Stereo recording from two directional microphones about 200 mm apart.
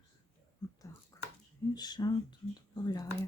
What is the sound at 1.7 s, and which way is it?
Speech, 20° left (ahead or behind).